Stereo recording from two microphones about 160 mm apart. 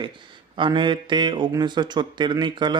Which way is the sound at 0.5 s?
30° right (ahead or behind).